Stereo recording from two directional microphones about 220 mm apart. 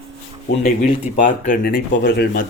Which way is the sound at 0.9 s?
35° left (ahead or behind).